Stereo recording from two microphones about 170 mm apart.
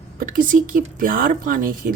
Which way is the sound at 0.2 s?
55° right (ahead or behind).